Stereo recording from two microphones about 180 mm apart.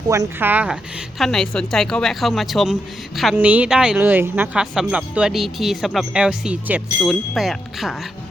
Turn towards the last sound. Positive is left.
turn(degrees=0)  # may be behind; listen again after turning